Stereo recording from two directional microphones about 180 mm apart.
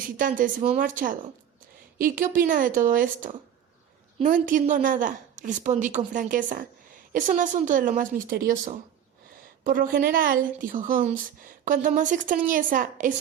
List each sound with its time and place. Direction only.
0.2 s a woman's voice: 45° right (ahead or behind)